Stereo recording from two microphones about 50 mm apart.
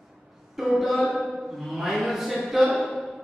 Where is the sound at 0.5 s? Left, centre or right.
Centre.